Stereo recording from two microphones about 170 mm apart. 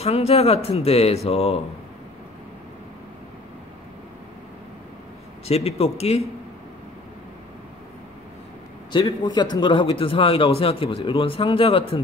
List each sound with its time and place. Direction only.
0.0 s a man's voice: 35° left (ahead or behind)
5.5 s a man's voice: 35° left (ahead or behind)
8.9 s a man's voice: 25° left (ahead or behind)